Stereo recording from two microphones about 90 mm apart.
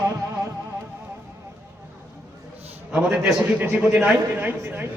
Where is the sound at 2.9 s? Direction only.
10° right (ahead or behind).